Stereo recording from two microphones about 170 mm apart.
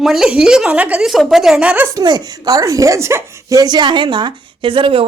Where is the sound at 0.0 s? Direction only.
5° right (ahead or behind).